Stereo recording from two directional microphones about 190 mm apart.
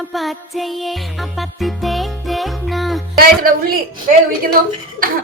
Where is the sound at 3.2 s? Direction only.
50° right (ahead or behind).